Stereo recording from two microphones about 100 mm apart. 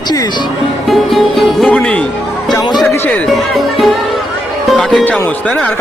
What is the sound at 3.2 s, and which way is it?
Speech, centre (ahead or behind).